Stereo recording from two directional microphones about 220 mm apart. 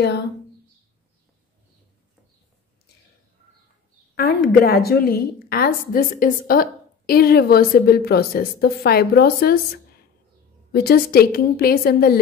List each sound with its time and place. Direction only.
4.1 s a woman's voice: 45° left (ahead or behind)
10.7 s a woman's voice: 45° left (ahead or behind)